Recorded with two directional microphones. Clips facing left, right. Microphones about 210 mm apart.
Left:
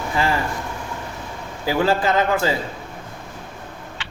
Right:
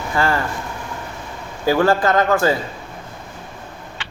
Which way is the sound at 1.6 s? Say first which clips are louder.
Right 3 dB; 15° left (ahead or behind).